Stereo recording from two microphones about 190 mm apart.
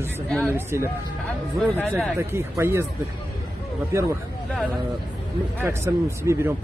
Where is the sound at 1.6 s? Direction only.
5° left (ahead or behind).